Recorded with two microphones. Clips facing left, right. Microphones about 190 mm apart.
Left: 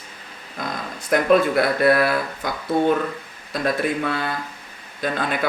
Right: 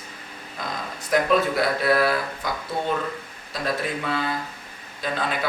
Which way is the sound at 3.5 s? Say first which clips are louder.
Left 6 dB; 55° left (ahead or behind).